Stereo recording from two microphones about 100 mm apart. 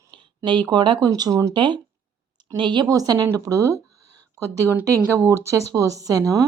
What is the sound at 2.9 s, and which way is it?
Speech, 40° right (ahead or behind).